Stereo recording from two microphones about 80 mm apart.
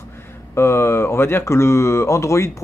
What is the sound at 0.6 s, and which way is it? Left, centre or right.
A man's voice, left.